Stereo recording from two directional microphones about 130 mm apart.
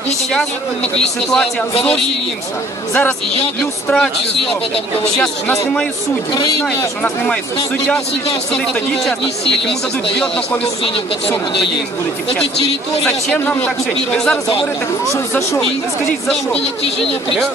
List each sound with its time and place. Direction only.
0.9 s speech: 5° left (ahead or behind)
2.9 s a man's voice: 15° left (ahead or behind)
13.0 s a man's voice: 10° left (ahead or behind)
15.1 s speech: 20° left (ahead or behind)